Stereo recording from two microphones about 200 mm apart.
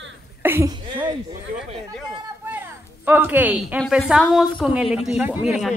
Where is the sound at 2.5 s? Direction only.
10° right (ahead or behind).